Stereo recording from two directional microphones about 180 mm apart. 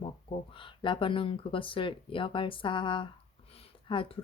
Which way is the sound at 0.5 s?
30° left (ahead or behind).